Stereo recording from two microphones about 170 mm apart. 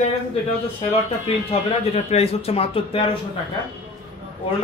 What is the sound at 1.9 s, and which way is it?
A man's voice, 35° left (ahead or behind).